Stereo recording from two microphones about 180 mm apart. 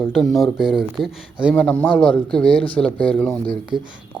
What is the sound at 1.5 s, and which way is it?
A man's voice, 10° left (ahead or behind).